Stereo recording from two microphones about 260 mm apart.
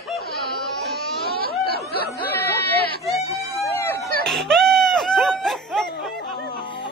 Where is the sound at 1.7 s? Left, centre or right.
Left.